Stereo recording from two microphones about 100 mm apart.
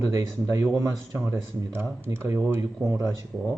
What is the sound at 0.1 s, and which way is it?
Speech, 30° right (ahead or behind).